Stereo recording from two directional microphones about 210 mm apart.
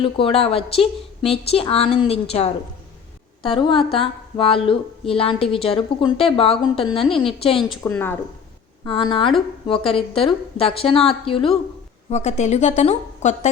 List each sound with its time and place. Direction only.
0.0 s a woman's voice: 25° left (ahead or behind)
7.9 s speech: 10° left (ahead or behind)
8.8 s a woman's voice: 20° left (ahead or behind)